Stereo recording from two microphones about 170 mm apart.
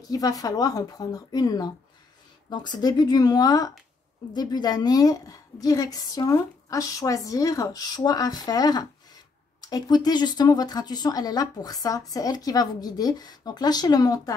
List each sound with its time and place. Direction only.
0.0 s a woman's voice: 20° left (ahead or behind)